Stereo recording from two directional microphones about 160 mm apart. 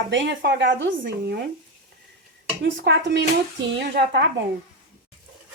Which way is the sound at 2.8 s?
90° right.